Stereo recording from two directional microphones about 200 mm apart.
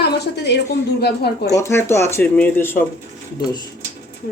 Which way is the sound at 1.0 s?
55° left (ahead or behind).